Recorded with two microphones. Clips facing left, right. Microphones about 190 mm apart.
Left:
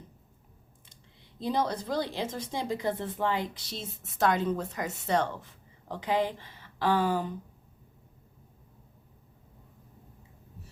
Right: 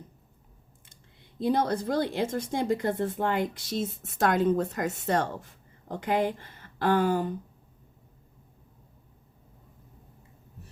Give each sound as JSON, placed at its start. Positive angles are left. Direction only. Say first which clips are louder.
{"t": 0.9, "sound": "speech", "louder": "right 2 dB", "side_deg": -55}